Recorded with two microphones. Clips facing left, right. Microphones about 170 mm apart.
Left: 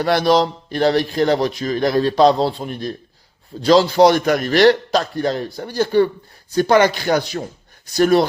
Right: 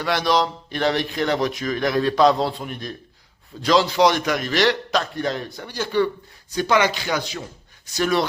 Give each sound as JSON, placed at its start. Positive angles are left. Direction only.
{"t": 0.0, "sound": "a man's voice", "side_deg": 35}